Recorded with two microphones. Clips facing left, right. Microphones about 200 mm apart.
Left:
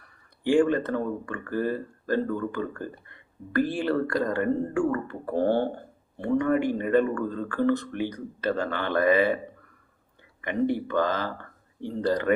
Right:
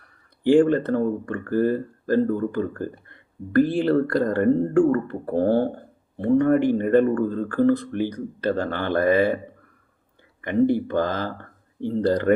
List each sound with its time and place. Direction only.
0.4 s speech: 35° right (ahead or behind)
10.4 s speech: 50° right (ahead or behind)
10.8 s speech: 40° right (ahead or behind)